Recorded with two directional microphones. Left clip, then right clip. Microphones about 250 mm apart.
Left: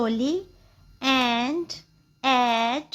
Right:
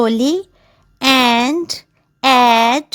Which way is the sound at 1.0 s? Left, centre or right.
Right.